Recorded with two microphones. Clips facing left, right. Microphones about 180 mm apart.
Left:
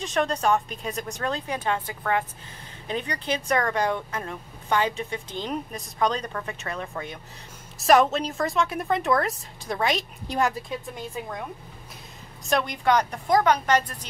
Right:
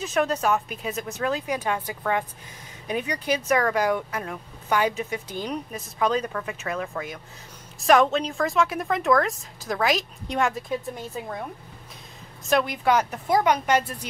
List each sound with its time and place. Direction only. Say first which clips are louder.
0.0 s speech: right 1 dB; 5° right (ahead or behind)
12.4 s speech: right 1 dB; 5° right (ahead or behind)